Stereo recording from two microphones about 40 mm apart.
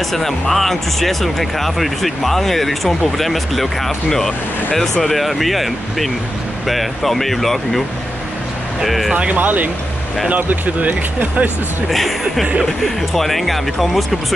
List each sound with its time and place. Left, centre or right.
0.1 s speech: centre
8.8 s speech: centre
9.1 s speech: right
11.9 s speech: centre